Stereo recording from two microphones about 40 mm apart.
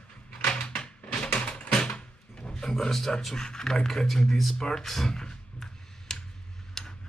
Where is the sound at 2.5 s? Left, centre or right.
Centre.